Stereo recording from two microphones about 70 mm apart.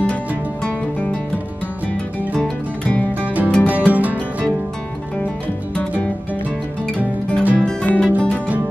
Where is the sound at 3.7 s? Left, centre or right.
Right.